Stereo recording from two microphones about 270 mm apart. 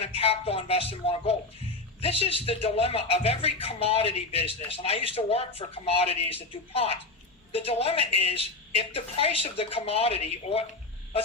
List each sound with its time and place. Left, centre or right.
0.0 s speech: left